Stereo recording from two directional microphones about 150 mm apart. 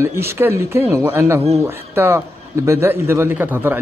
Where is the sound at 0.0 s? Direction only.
15° right (ahead or behind).